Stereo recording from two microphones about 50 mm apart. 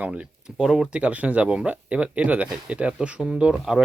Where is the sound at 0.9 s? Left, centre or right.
Right; by 3.8 s centre.